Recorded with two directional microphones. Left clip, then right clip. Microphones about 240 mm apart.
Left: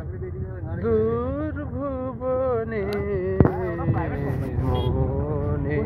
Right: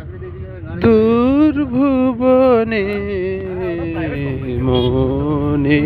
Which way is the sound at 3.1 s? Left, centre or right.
Centre.